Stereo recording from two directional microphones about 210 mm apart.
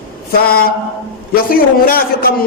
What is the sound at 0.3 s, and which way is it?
A man's voice, 45° left (ahead or behind).